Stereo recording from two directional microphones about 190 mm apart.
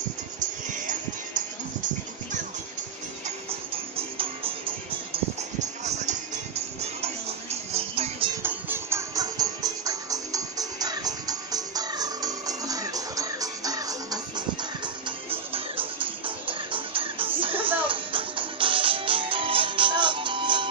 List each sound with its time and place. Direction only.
0.9 s music: 40° right (ahead or behind)
3.2 s music: 30° right (ahead or behind)
8.4 s music: 10° right (ahead or behind)